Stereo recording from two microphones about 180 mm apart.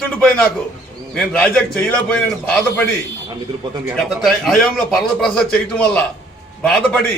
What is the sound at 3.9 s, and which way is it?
A man's voice, centre (ahead or behind).